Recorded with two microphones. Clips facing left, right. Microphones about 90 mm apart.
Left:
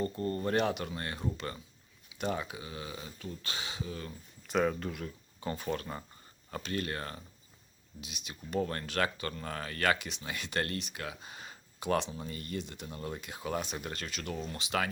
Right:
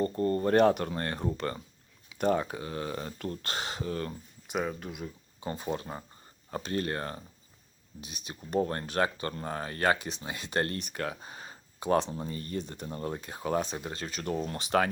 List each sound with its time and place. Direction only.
0.0 s speech: 40° right (ahead or behind); by 3.3 s 55° right (ahead or behind)
3.4 s speech: 40° right (ahead or behind)
4.4 s speech: 10° right (ahead or behind)
4.9 s speech: 15° right (ahead or behind)
6.5 s speech: 35° right (ahead or behind)
10.8 s speech: 45° right (ahead or behind)
14.4 s speech: 50° right (ahead or behind)